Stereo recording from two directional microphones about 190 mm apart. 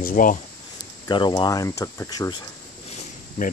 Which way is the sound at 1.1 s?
25° left (ahead or behind).